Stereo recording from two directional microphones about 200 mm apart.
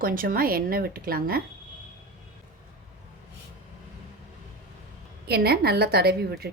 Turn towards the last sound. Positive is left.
turn(degrees=-50)  # may be behind; listen again after turning